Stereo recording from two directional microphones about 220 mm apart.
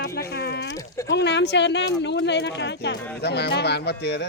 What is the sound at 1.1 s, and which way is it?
A man's voice, 50° left (ahead or behind).